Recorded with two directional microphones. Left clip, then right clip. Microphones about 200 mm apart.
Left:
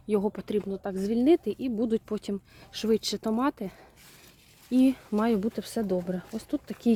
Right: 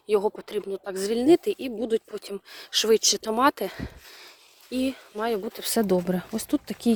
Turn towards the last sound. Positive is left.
turn(degrees=-25)  # may be behind; listen again after turning